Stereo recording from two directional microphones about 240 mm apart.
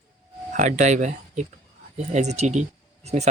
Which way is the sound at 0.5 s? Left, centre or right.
Right.